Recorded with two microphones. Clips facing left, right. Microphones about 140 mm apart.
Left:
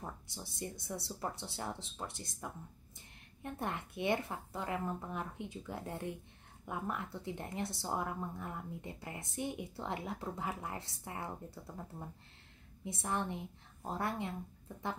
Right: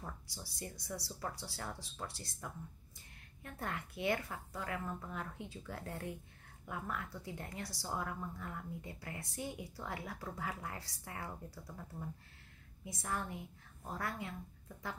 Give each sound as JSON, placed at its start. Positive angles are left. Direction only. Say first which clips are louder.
{"t": 0.0, "sound": "speech", "louder": "left 3 dB", "side_deg": 20}